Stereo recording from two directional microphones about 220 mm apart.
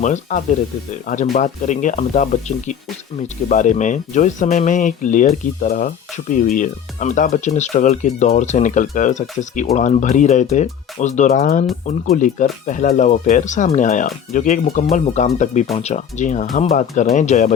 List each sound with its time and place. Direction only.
0.0 s speech: 35° left (ahead or behind)